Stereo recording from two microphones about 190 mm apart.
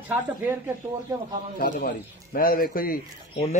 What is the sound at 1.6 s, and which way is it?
Speech, 50° left (ahead or behind).